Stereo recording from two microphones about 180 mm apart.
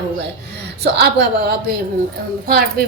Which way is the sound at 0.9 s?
65° right (ahead or behind).